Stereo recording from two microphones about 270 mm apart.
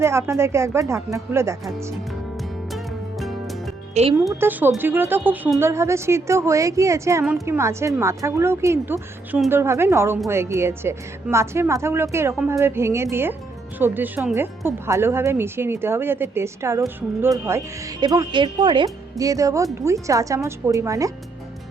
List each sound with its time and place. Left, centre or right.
0.0 s a woman's voice: centre
2.7 s music: centre
4.0 s speech: right
4.3 s a woman's voice: centre